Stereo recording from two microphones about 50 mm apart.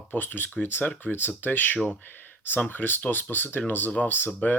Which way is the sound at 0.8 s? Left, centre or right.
Left.